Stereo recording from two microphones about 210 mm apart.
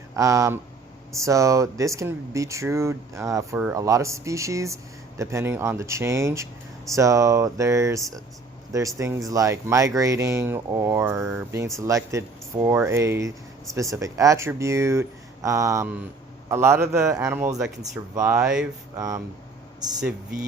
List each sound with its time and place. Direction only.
0.2 s speech: 15° right (ahead or behind)
18.3 s speech: 5° right (ahead or behind)
18.9 s speech: 15° right (ahead or behind)